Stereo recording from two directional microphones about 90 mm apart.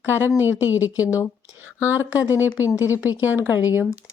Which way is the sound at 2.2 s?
20° right (ahead or behind).